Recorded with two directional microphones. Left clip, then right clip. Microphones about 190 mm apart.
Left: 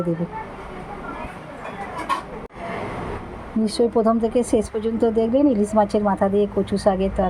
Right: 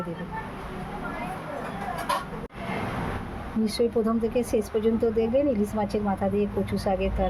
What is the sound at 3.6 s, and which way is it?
Speech, 30° left (ahead or behind).